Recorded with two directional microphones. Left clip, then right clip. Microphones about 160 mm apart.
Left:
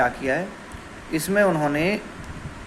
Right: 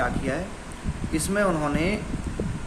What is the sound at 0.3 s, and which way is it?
Speech, 25° left (ahead or behind).